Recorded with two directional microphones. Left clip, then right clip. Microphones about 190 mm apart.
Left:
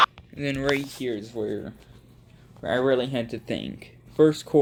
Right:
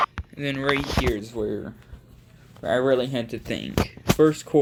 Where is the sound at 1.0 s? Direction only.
15° right (ahead or behind).